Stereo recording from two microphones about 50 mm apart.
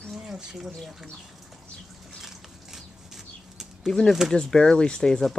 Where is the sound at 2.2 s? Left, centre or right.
Centre.